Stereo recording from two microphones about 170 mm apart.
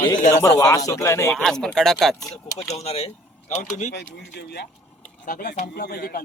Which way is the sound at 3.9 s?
90° left.